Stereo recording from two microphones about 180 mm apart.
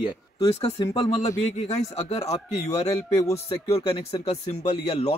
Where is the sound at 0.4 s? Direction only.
30° left (ahead or behind).